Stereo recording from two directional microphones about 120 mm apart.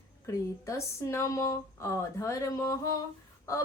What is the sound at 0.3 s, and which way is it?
A woman's voice, 25° left (ahead or behind).